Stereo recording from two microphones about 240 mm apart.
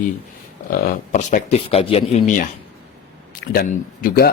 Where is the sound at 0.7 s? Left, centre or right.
Left.